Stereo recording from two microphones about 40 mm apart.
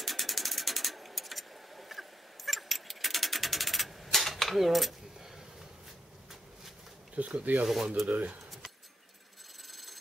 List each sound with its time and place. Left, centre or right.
0.0 s mechanisms: centre
7.2 s speech: right
7.6 s speech: centre
9.7 s a sound: centre